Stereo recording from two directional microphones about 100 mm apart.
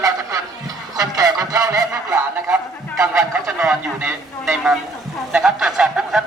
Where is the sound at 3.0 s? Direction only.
10° right (ahead or behind).